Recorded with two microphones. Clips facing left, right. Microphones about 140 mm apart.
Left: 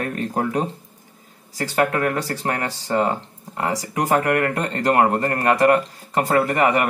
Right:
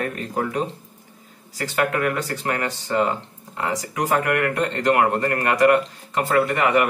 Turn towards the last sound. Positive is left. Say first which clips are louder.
# even
turn(degrees=35)  # may be behind; listen again after turning